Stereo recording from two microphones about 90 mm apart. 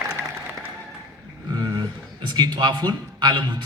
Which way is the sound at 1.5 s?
50° right (ahead or behind).